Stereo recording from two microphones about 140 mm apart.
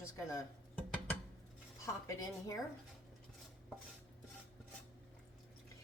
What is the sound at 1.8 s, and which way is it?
Speech, 25° left (ahead or behind).